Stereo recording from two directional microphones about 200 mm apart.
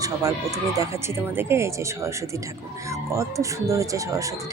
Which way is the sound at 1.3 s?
15° right (ahead or behind).